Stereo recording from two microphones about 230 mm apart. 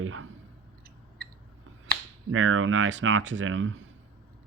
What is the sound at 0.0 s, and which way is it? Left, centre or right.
Clicking, right.